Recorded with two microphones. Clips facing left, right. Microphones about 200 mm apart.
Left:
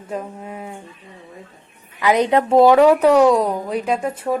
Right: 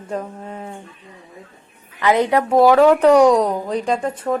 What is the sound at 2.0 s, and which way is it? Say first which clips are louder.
Speech: even; 15° left (ahead or behind).